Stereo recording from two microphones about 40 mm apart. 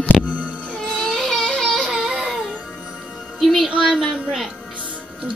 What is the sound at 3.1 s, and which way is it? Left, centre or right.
Music, centre.